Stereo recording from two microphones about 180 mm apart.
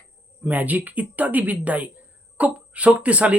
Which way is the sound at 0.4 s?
10° right (ahead or behind).